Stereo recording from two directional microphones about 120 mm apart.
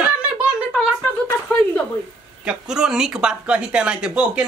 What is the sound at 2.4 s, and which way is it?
Speech, 5° right (ahead or behind).